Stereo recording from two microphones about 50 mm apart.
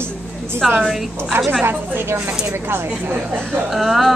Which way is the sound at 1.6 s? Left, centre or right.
Right.